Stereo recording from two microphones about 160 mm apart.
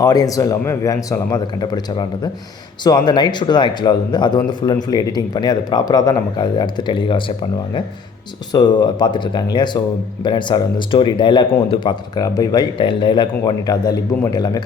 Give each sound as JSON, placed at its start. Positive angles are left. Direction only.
{"t": 0.0, "sound": "a man's voice", "side_deg": 20}